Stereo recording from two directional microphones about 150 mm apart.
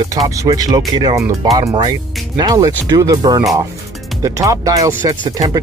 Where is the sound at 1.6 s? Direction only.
35° right (ahead or behind).